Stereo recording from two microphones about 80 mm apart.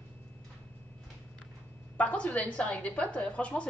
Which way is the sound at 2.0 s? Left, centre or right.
Centre.